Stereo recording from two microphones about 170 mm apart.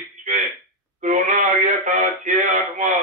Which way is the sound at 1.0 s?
45° right (ahead or behind).